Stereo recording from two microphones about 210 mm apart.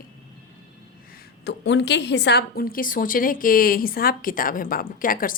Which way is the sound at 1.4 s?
55° left (ahead or behind).